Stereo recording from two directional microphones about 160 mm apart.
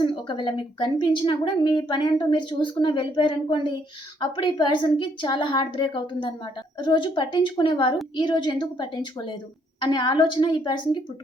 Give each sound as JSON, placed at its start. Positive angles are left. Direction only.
{"t": 0.0, "sound": "a woman's voice", "side_deg": 30}